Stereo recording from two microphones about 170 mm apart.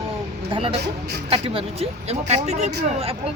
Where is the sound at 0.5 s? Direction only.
35° right (ahead or behind).